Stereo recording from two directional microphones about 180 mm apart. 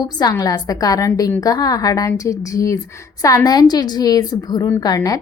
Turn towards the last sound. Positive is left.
turn(degrees=20)  # may be behind; listen again after turning